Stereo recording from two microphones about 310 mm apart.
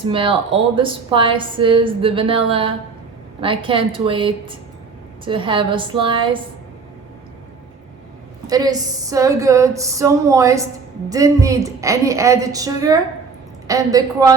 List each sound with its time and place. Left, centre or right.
0.0 s a woman's voice: centre
8.4 s a woman's voice: centre